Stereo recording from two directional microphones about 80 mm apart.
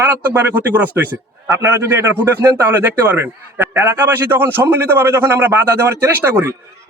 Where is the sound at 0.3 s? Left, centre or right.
Right.